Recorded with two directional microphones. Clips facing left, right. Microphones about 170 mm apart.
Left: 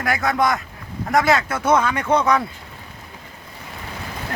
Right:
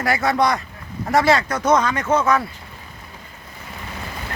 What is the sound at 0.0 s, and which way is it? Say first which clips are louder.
Speech: right 1 dB; centre (ahead or behind).